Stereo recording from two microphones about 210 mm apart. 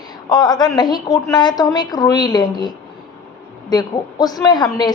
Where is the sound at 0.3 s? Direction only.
20° left (ahead or behind).